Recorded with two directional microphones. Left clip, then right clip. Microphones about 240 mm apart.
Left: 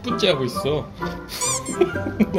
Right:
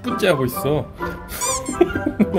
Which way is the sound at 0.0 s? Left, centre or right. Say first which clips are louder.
Right 2 dB; right.